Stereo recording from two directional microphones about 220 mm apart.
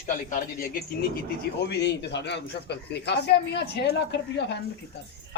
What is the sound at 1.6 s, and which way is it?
Speech, 50° left (ahead or behind).